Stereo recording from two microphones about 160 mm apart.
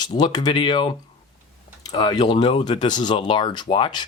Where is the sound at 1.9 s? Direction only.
25° left (ahead or behind).